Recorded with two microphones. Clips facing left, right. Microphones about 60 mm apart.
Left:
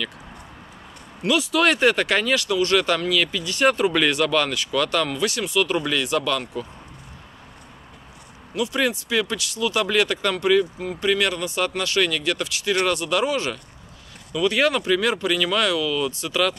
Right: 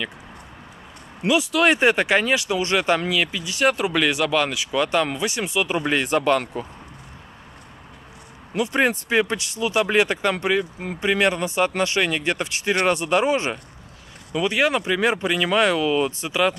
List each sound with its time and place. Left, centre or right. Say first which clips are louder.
1.4 s speech: even; centre
1.7 s speech: right 3 dB; centre
5.9 s speech: right 3 dB; right
8.5 s speech: right 2 dB; right